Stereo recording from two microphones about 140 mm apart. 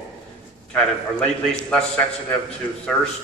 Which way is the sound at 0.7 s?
5° left (ahead or behind).